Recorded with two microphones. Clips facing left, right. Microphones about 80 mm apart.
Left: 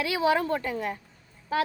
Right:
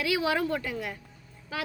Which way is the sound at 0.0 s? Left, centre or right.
Left.